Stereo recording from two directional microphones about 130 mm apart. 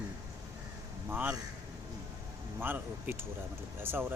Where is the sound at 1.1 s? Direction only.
10° right (ahead or behind).